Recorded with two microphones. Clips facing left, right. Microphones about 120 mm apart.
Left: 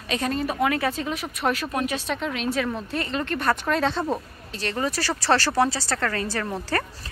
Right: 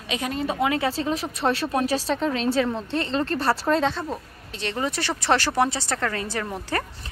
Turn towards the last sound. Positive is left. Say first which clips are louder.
# left 1 dB
turn(degrees=-15)  # may be behind; listen again after turning